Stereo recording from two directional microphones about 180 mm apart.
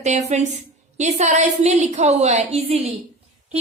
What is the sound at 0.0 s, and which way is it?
A woman's voice, 40° right (ahead or behind).